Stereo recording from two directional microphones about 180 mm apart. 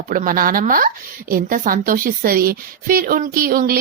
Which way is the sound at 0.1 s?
50° right (ahead or behind).